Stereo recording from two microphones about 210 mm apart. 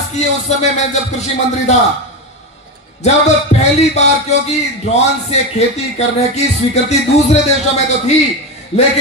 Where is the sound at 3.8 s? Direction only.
30° left (ahead or behind).